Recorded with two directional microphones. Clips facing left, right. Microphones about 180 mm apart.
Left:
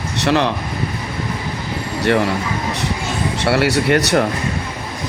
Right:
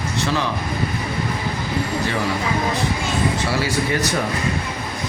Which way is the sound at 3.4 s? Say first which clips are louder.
Left 5 dB; 70° left (ahead or behind).